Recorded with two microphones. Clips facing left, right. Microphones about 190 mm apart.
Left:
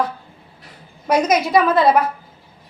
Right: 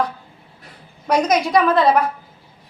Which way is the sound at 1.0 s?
5° left (ahead or behind).